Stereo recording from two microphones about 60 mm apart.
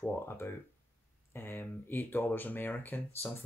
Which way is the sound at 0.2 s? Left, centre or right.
Left.